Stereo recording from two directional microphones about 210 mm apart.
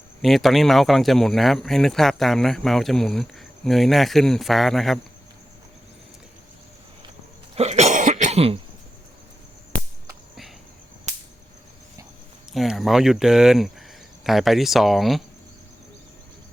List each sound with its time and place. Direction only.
0.2 s speech: centre (ahead or behind)
7.5 s cough: 30° right (ahead or behind)
11.1 s a sound: 35° right (ahead or behind)
12.5 s speech: centre (ahead or behind)